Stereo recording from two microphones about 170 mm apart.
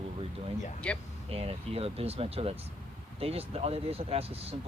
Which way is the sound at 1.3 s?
35° right (ahead or behind).